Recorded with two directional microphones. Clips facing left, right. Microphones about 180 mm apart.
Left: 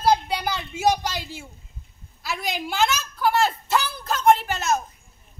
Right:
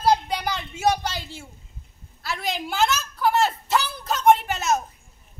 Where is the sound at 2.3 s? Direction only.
Centre (ahead or behind).